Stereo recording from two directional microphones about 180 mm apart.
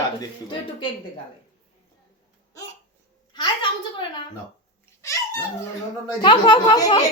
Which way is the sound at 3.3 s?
25° left (ahead or behind).